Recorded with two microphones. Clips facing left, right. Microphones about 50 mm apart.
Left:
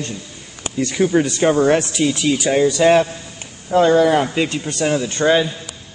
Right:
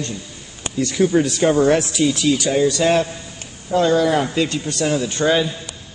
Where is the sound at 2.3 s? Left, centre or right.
Left.